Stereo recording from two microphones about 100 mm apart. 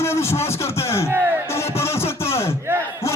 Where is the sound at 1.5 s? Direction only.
25° left (ahead or behind).